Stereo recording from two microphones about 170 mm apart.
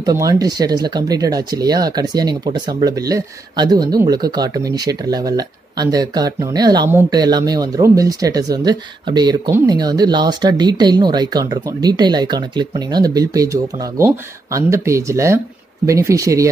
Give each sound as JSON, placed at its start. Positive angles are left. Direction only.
{"t": 0.0, "sound": "speech", "side_deg": -20}